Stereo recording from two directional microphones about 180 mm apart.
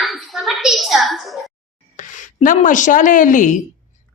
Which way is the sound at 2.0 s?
45° left (ahead or behind).